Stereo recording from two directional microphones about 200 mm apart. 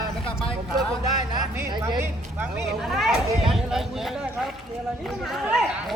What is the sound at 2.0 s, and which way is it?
Speech, 5° right (ahead or behind).